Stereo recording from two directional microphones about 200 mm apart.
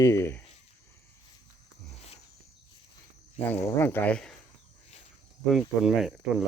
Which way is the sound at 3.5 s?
10° left (ahead or behind).